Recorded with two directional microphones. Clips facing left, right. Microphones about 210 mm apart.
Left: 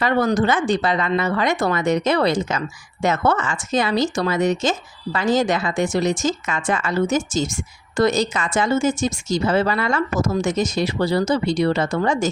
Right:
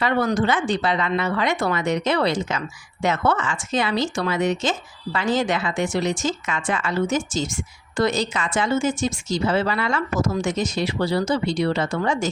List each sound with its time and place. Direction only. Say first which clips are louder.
0.0 s speech: left 2 dB; 45° left (ahead or behind)